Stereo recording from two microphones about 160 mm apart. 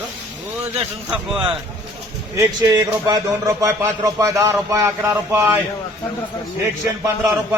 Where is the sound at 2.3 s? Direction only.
20° right (ahead or behind).